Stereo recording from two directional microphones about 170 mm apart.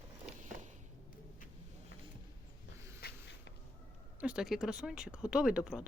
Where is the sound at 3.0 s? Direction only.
90° left.